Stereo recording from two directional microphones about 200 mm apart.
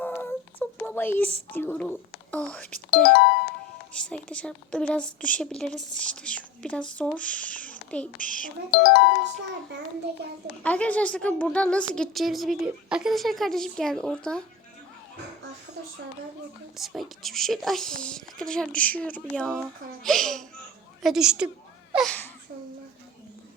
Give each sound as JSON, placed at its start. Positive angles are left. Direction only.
{"t": 0.0, "sound": "a sound", "side_deg": 10}
{"t": 1.5, "sound": "a woman's voice", "side_deg": 5}
{"t": 3.0, "sound": "speech", "side_deg": 50}
{"t": 3.9, "sound": "a woman's voice", "side_deg": 5}
{"t": 8.2, "sound": "speech", "side_deg": 45}
{"t": 10.6, "sound": "a woman's voice", "side_deg": 5}
{"t": 16.7, "sound": "a woman's voice", "side_deg": 0}